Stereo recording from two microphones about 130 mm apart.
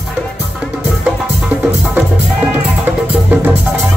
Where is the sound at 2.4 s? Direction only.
15° right (ahead or behind).